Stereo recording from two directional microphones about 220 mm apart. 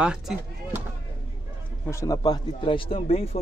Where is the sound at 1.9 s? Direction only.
15° left (ahead or behind).